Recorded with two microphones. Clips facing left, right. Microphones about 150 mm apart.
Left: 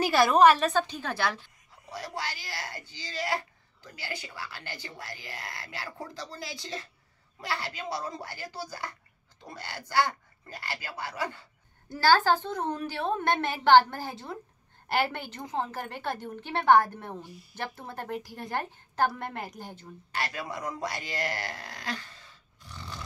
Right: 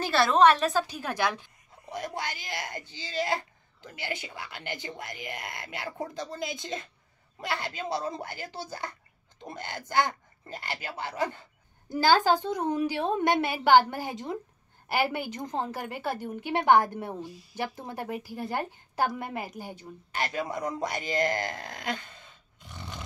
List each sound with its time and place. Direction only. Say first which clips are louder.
0.0 s a woman's voice: left 1 dB; 15° left (ahead or behind); by 14.4 s 15° right (ahead or behind)
14.9 s a woman's voice: right 1 dB; 5° right (ahead or behind)
20.2 s speech: right 4 dB; 20° right (ahead or behind)